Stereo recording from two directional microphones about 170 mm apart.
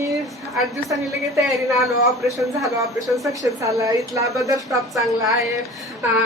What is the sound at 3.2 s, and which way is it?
Speech, 20° right (ahead or behind).